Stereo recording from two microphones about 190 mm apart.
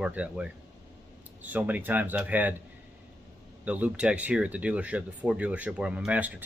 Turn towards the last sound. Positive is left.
turn(degrees=-10)  # may be behind; listen again after turning